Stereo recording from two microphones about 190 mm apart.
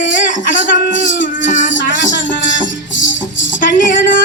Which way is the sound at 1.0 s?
45° left (ahead or behind).